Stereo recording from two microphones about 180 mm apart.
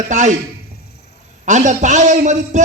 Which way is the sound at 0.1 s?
40° right (ahead or behind).